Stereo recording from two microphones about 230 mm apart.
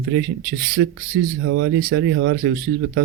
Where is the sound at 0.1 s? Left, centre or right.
Right.